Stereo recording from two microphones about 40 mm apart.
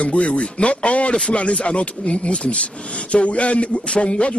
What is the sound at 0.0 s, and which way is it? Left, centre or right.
Speech, left.